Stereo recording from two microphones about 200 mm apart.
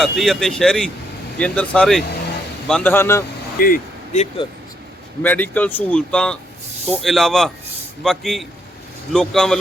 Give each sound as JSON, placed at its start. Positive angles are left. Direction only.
{"t": 0.0, "sound": "speech", "side_deg": 0}
{"t": 3.6, "sound": "speech", "side_deg": 40}
{"t": 5.2, "sound": "speech", "side_deg": 10}